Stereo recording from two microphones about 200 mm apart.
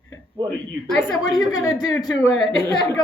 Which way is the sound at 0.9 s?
Centre (ahead or behind).